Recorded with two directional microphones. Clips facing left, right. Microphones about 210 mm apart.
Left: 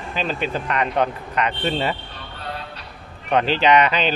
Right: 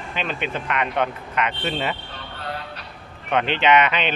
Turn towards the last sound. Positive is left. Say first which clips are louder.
# left 2 dB
turn(degrees=35)  # may be behind; listen again after turning